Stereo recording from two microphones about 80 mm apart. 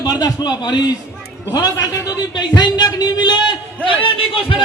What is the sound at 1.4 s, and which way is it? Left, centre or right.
Speech, left.